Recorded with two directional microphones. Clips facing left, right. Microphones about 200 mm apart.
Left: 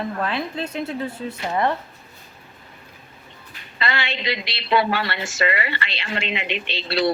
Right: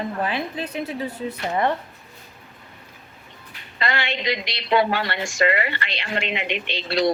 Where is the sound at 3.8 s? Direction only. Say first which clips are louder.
Right 1 dB; 45° right (ahead or behind).